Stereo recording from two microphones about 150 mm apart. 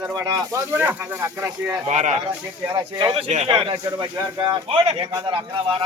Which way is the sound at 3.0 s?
35° right (ahead or behind).